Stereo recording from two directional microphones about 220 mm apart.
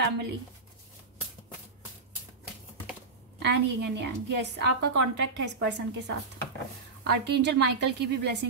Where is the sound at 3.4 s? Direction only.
50° right (ahead or behind).